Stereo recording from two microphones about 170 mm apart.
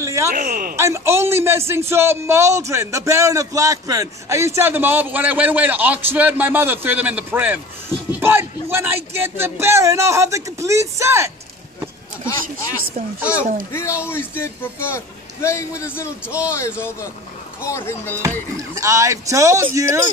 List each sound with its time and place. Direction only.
0.0 s a sound: 15° right (ahead or behind)
0.3 s a sound: 55° right (ahead or behind)
0.7 s a man's voice: 15° right (ahead or behind)
13.2 s a man's voice: 10° right (ahead or behind)
13.7 s a man's voice: 15° left (ahead or behind)
18.8 s a man's voice: 20° right (ahead or behind)